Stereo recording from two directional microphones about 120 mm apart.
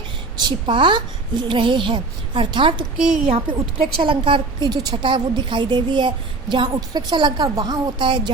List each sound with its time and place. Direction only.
0.3 s a woman's voice: 40° right (ahead or behind)